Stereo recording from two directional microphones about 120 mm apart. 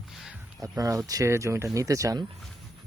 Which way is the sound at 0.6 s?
30° right (ahead or behind).